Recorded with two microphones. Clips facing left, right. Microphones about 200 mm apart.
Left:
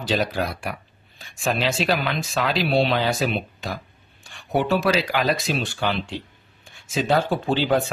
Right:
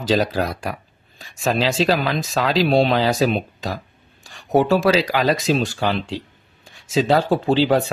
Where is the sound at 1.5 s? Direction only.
90° right.